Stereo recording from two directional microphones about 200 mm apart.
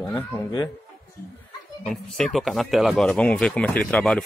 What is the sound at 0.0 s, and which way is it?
Speech, 10° left (ahead or behind).